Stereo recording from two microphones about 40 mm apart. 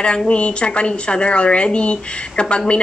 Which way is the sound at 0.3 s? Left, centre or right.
Left.